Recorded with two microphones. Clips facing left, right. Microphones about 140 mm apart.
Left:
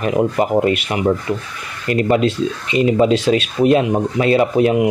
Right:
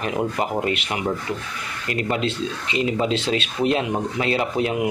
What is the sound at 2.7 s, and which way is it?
Speech, 45° left (ahead or behind).